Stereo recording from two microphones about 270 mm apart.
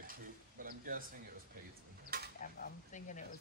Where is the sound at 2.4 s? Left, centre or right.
Left.